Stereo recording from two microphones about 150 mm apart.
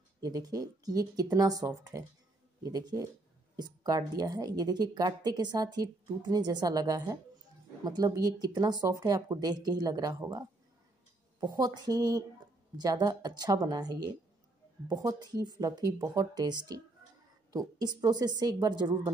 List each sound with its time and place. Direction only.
0.2 s speech: 25° right (ahead or behind)